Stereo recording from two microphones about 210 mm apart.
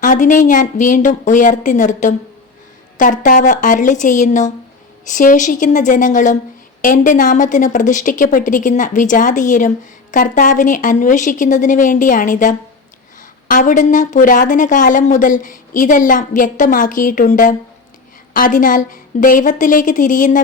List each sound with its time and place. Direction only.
0.0 s a woman's voice: 35° left (ahead or behind)